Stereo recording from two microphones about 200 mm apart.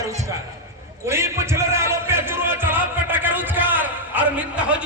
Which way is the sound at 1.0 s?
15° right (ahead or behind).